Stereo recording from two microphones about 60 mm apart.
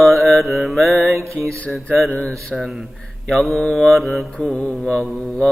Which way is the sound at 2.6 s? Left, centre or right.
Centre.